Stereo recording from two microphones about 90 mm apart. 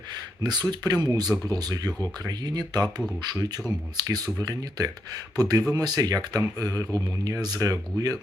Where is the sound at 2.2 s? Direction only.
50° right (ahead or behind).